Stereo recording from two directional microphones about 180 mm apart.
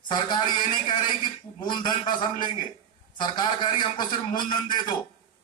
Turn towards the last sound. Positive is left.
turn(degrees=25)  # may be behind; listen again after turning